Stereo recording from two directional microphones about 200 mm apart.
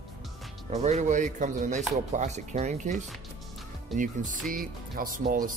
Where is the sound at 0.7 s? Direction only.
35° right (ahead or behind).